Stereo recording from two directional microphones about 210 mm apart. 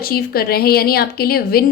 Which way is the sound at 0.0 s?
45° left (ahead or behind).